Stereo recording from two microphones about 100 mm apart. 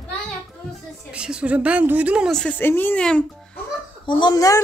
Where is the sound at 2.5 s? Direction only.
20° left (ahead or behind).